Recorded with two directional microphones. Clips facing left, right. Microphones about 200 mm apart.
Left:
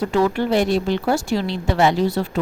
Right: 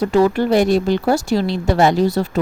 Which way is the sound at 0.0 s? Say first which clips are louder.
Right 4 dB; 40° right (ahead or behind).